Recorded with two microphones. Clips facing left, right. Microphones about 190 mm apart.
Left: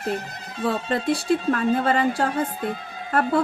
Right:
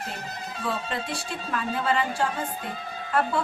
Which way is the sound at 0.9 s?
45° left (ahead or behind).